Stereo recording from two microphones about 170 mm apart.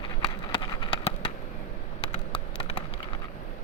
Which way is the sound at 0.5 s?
30° left (ahead or behind).